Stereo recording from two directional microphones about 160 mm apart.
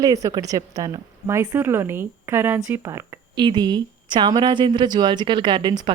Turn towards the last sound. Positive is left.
turn(degrees=-30)  # may be behind; listen again after turning